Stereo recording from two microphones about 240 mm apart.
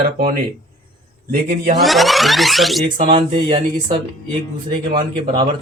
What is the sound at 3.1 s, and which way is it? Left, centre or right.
Speech, centre.